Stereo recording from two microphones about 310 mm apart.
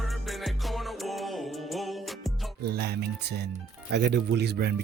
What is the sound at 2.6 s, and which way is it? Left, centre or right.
Speech, right.